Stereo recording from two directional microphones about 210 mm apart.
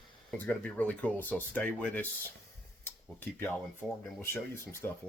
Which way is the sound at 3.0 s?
10° left (ahead or behind).